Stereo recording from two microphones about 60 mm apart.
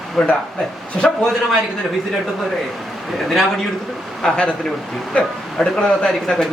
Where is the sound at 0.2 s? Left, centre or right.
Centre.